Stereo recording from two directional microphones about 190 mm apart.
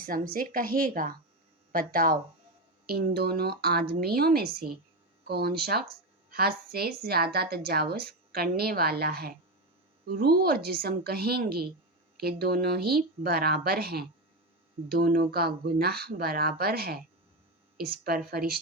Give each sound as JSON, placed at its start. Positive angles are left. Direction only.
{"t": 0.0, "sound": "a woman's voice", "side_deg": -50}